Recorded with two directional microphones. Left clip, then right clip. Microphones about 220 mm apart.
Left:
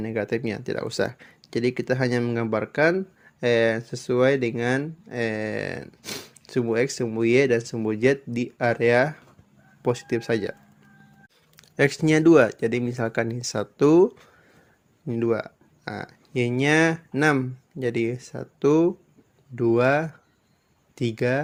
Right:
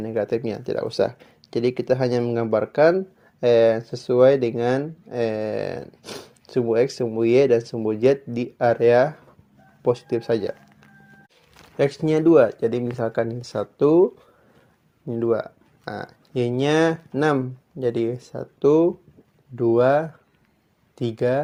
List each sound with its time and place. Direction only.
0.0 s speech: 45° left (ahead or behind)
11.5 s speech: 40° left (ahead or behind)